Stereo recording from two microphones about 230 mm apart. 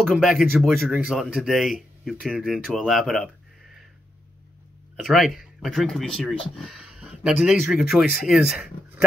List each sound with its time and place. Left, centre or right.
0.0 s speech: centre
5.0 s speech: centre